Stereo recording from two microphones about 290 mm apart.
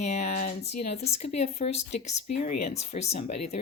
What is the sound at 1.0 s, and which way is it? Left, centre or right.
Speech, left.